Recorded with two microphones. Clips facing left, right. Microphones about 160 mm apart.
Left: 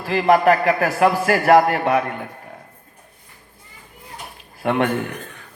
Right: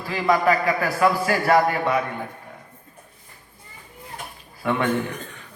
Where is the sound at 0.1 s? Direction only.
60° left (ahead or behind).